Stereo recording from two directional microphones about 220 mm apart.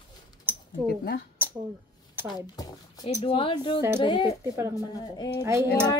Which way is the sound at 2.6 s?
20° left (ahead or behind).